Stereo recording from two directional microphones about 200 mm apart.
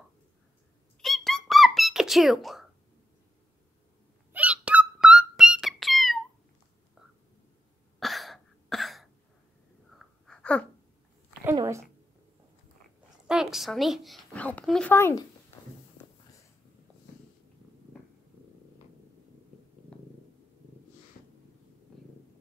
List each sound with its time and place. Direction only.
1.0 s squeak: centre (ahead or behind)
4.3 s music: 5° right (ahead or behind)
8.0 s a sound: centre (ahead or behind)
9.8 s wheeze: centre (ahead or behind)
11.5 s a sound: 15° right (ahead or behind)
13.3 s a woman's voice: centre (ahead or behind); by 15.2 s 15° left (ahead or behind)